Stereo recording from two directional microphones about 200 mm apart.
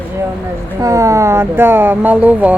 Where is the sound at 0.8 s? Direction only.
15° right (ahead or behind).